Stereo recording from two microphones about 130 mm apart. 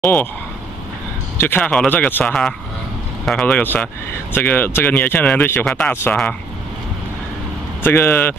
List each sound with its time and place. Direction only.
1.4 s speech: 10° left (ahead or behind)
7.8 s speech: 15° left (ahead or behind)